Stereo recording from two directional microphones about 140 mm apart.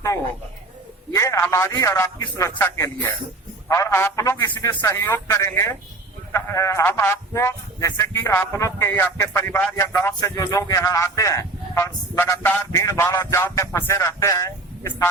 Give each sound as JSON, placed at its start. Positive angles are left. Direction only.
{"t": 1.1, "sound": "speech", "side_deg": 20}